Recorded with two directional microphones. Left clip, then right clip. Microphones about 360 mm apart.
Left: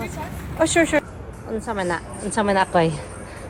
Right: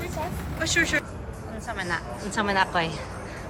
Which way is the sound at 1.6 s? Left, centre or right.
Centre.